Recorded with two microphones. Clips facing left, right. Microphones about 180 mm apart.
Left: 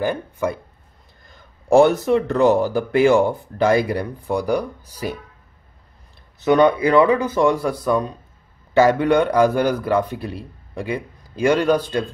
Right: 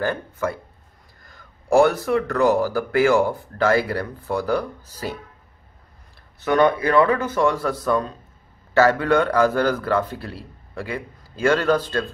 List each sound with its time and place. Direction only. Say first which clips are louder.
0.0 s a man's voice: left 2 dB; 15° left (ahead or behind)
6.4 s a man's voice: left 3 dB; 15° left (ahead or behind)